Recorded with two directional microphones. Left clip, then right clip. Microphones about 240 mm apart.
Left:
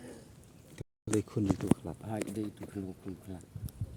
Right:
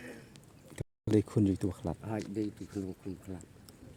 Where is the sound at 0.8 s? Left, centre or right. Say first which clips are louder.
Right 5 dB; right.